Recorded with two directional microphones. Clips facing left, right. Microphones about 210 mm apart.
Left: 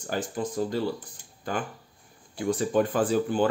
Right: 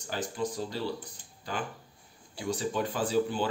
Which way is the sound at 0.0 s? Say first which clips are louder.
Left 3 dB; 50° left (ahead or behind).